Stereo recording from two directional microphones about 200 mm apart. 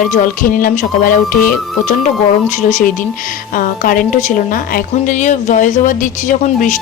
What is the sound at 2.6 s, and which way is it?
Speech, 40° left (ahead or behind).